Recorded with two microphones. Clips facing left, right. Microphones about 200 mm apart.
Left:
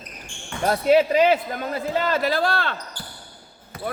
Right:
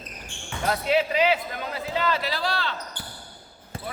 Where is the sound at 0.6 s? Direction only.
45° left (ahead or behind).